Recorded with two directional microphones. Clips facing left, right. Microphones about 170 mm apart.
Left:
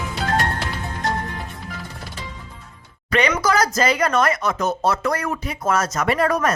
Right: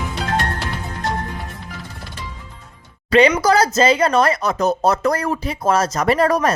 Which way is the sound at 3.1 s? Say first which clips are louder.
Right 6 dB; 30° right (ahead or behind).